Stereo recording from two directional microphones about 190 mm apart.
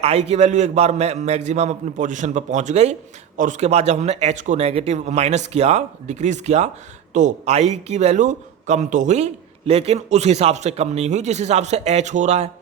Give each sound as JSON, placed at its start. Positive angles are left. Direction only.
{"t": 0.0, "sound": "a man's voice", "side_deg": -35}